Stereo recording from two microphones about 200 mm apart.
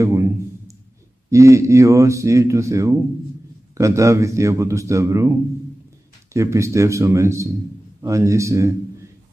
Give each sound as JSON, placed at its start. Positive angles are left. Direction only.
{"t": 0.0, "sound": "a sound", "side_deg": -15}
{"t": 1.3, "sound": "a man's voice", "side_deg": -15}
{"t": 6.3, "sound": "a man's voice", "side_deg": -15}